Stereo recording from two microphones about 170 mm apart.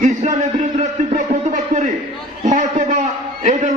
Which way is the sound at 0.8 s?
45° right (ahead or behind).